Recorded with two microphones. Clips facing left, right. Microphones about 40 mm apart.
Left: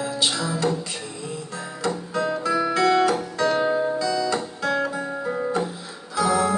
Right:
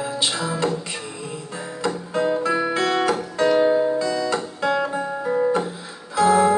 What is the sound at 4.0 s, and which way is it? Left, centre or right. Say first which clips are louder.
Music: right 1 dB; right.